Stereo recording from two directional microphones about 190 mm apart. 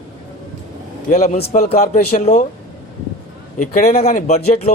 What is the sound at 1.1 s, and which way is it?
Speech, 35° left (ahead or behind).